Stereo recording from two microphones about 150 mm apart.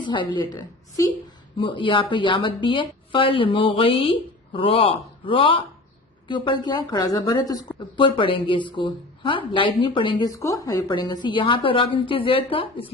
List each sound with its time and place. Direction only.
0.0 s a woman's voice: 30° left (ahead or behind)